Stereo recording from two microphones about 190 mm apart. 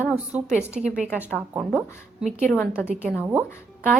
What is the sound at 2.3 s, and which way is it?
Speech, 40° right (ahead or behind).